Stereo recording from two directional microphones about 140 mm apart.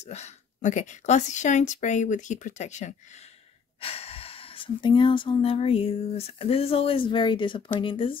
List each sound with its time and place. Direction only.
0.0 s a woman's voice: 55° left (ahead or behind)
3.8 s speech: 45° left (ahead or behind)